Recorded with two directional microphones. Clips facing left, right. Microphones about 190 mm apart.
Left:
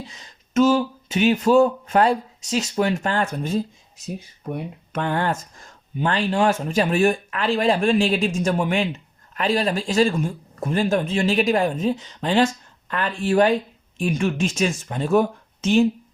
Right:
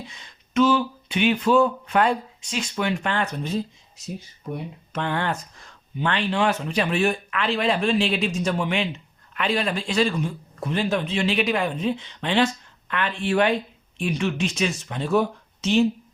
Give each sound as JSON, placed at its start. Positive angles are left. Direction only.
{"t": 0.2, "sound": "speech", "side_deg": 40}
{"t": 4.4, "sound": "speech", "side_deg": 55}